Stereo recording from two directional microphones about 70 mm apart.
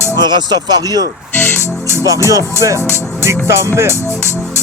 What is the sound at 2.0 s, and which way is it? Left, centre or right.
Music, right.